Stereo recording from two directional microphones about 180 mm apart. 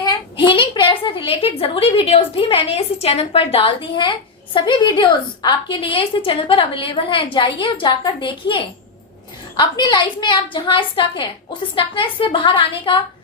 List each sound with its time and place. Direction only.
0.0 s a woman's voice: 25° left (ahead or behind)